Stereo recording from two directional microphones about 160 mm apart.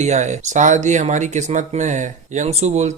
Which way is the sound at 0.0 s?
45° right (ahead or behind).